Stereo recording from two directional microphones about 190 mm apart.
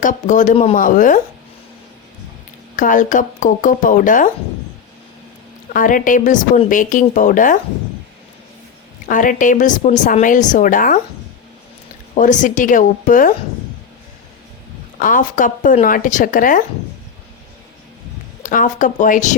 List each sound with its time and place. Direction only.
0.0 s speech: 40° left (ahead or behind)
2.7 s speech: 45° left (ahead or behind)
5.7 s speech: 45° left (ahead or behind)
9.0 s speech: 45° left (ahead or behind)
12.1 s speech: 40° left (ahead or behind)
14.9 s speech: 45° left (ahead or behind)
18.4 s speech: 45° left (ahead or behind)